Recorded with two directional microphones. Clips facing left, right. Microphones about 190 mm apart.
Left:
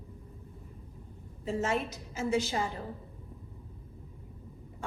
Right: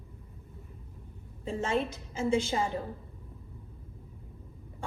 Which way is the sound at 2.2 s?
25° right (ahead or behind).